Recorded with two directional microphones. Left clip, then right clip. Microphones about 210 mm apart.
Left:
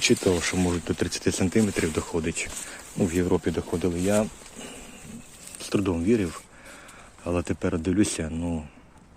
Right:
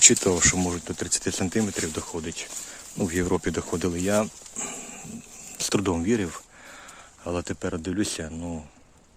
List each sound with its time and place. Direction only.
0.0 s speech: 20° right (ahead or behind)
0.9 s speech: centre (ahead or behind)
3.0 s speech: 20° right (ahead or behind)
7.3 s speech: 10° right (ahead or behind)